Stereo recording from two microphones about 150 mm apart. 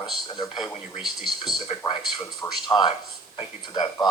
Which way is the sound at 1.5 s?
30° left (ahead or behind).